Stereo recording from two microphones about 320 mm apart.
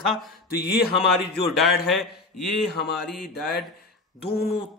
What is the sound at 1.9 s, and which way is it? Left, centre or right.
Speech, centre.